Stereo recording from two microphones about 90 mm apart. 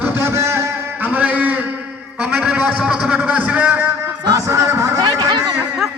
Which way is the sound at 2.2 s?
15° right (ahead or behind).